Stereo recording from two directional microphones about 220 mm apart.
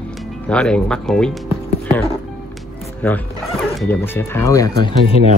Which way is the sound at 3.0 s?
10° left (ahead or behind).